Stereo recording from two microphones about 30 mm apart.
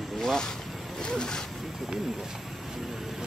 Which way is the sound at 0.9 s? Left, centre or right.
Left.